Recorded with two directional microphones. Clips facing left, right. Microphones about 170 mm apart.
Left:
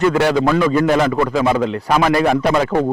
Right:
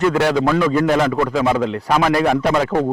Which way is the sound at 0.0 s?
15° left (ahead or behind).